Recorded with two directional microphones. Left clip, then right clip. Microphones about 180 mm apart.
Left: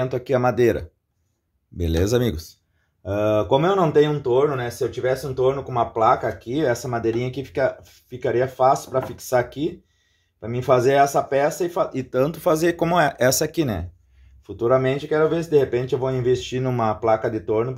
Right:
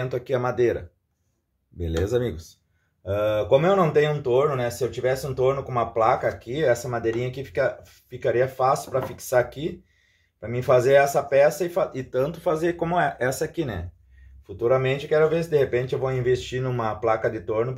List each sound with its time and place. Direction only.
0.0 s speech: 45° left (ahead or behind); by 2.4 s 65° left (ahead or behind)
3.0 s speech: 55° left (ahead or behind); by 13.8 s 75° left (ahead or behind)
14.4 s speech: 50° left (ahead or behind)